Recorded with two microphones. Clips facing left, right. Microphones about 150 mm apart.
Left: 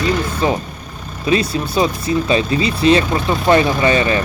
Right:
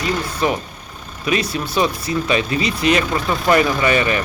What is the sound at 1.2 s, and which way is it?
Speech, 30° left (ahead or behind).